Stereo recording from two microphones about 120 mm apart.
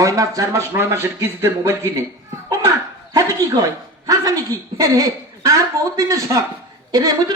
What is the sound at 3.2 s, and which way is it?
A man's voice, 30° right (ahead or behind).